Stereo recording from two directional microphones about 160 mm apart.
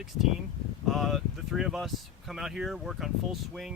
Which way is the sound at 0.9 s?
Centre (ahead or behind).